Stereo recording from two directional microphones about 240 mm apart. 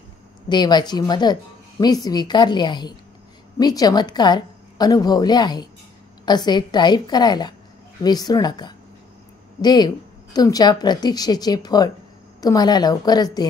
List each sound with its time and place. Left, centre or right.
0.5 s a woman's voice: centre